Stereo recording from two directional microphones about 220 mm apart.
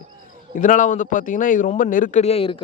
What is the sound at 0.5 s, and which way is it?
Speech, 35° left (ahead or behind).